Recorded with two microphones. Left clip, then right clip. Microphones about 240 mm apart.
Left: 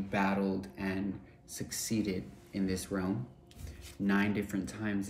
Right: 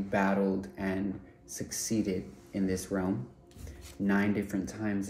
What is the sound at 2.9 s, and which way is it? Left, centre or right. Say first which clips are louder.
Speech: right 3 dB; centre.